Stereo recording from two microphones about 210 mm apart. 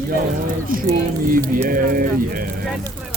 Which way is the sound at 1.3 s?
40° right (ahead or behind).